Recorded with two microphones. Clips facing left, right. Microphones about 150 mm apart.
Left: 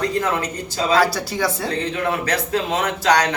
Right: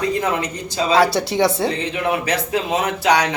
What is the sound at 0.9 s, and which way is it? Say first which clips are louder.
Speech: right 4 dB; 25° right (ahead or behind).